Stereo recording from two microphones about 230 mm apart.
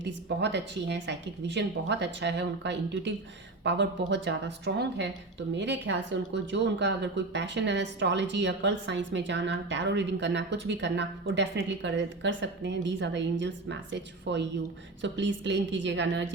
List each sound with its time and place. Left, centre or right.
0.0 s a woman's voice: right